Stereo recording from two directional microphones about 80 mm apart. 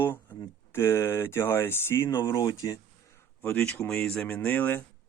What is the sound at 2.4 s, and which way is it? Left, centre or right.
Speech, left.